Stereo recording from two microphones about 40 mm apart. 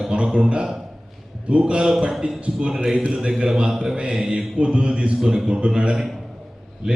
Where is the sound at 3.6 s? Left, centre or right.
Right.